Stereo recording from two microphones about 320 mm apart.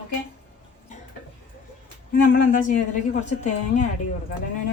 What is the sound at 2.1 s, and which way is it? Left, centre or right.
A woman's voice, left.